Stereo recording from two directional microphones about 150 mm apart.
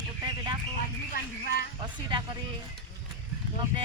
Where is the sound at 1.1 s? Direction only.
75° left (ahead or behind).